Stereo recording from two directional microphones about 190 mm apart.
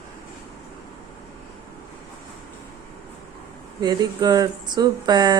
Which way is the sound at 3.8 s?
20° right (ahead or behind).